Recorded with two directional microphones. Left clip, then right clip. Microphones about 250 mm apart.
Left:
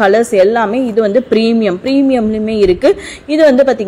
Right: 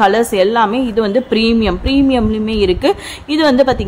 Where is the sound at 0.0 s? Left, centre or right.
Centre.